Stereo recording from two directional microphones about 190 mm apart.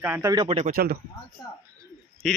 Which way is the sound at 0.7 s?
55° right (ahead or behind).